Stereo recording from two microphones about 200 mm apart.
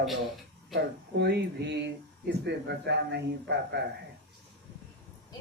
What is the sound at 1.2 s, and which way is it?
Speech, 60° right (ahead or behind).